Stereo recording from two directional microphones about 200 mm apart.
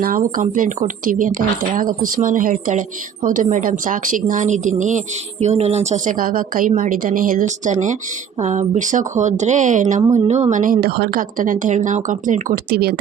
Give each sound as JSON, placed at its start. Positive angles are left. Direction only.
{"t": 0.0, "sound": "a woman's voice", "side_deg": -45}